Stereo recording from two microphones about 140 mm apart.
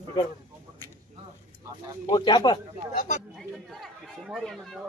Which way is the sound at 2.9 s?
60° left (ahead or behind).